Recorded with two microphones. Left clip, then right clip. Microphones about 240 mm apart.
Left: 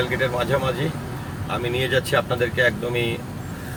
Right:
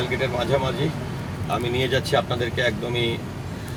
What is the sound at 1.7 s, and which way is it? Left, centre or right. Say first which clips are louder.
A man's voice: left 2 dB; centre.